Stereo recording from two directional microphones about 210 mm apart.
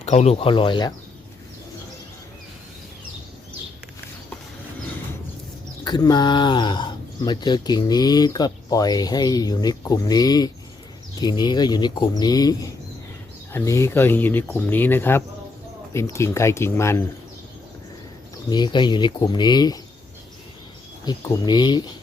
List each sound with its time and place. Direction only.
0.0 s speech: 30° left (ahead or behind)
5.8 s speech: 20° left (ahead or behind)
18.4 s speech: 20° left (ahead or behind)
21.0 s speech: 20° left (ahead or behind)